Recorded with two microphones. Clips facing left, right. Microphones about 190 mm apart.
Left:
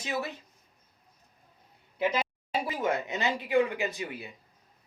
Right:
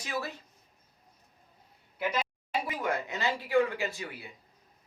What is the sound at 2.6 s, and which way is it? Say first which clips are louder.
A woman's voice: left 5 dB; 20° left (ahead or behind).